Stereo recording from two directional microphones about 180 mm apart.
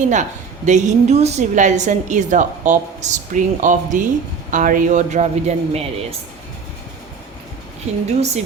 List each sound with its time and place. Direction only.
0.1 s a woman's voice: 40° right (ahead or behind)
7.9 s a woman's voice: 40° right (ahead or behind)